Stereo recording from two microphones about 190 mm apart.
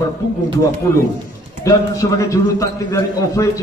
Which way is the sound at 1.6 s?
15° left (ahead or behind).